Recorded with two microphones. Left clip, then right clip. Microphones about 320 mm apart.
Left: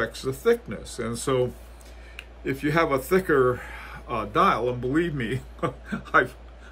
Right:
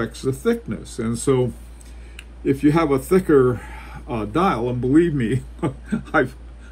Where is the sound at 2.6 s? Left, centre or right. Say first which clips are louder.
Right 4 dB; centre.